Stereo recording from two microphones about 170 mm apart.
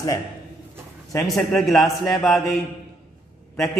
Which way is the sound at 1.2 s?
Centre (ahead or behind).